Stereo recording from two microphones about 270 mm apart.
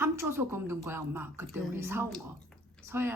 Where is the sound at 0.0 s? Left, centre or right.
Centre.